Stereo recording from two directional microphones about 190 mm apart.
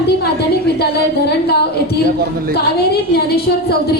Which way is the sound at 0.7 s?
60° left (ahead or behind).